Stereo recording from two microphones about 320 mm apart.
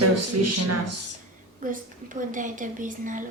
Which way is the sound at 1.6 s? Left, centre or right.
Right.